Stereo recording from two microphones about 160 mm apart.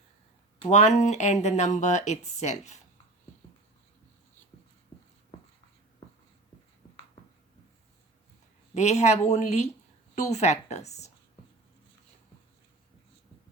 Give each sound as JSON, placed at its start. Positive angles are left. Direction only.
{"t": 0.7, "sound": "speech", "side_deg": 50}
{"t": 8.7, "sound": "speech", "side_deg": 45}